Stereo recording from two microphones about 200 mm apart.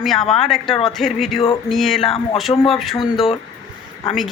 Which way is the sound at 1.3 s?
25° left (ahead or behind).